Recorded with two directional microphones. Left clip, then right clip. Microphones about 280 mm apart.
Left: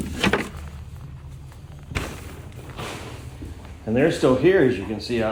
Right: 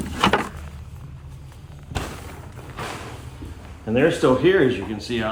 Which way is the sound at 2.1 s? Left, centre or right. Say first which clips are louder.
Right 2 dB; centre.